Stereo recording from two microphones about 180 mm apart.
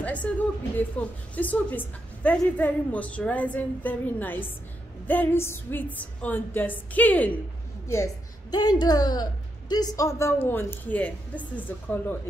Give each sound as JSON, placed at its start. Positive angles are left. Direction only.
{"t": 0.0, "sound": "a woman's voice", "side_deg": 5}